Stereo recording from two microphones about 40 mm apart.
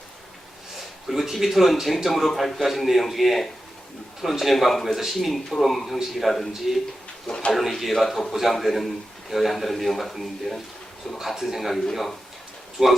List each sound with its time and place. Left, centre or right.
0.8 s a man's voice: centre
7.3 s speech: centre
7.7 s speech: centre
8.3 s speech: centre
12.8 s speech: centre